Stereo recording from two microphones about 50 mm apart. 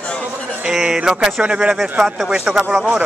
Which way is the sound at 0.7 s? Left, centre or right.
Centre.